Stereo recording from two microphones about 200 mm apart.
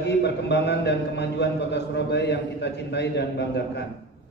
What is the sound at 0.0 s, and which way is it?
A man's voice, 55° left (ahead or behind).